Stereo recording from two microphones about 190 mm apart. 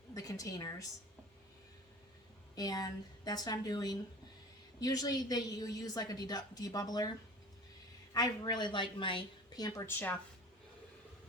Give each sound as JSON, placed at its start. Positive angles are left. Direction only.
{"t": 0.1, "sound": "a woman's voice", "side_deg": 20}
{"t": 2.6, "sound": "a woman's voice", "side_deg": 20}
{"t": 8.1, "sound": "a woman's voice", "side_deg": 20}